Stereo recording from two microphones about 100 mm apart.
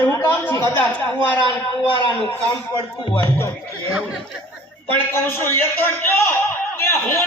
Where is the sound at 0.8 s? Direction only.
15° left (ahead or behind).